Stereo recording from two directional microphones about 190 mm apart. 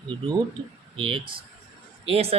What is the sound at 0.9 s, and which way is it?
A man's voice, 30° right (ahead or behind).